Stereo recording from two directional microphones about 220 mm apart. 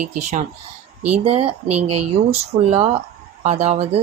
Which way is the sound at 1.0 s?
90° right.